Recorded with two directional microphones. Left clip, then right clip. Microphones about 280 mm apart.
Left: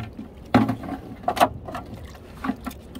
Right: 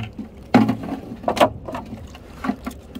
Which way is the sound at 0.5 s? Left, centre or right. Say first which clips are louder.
Right 3 dB; right.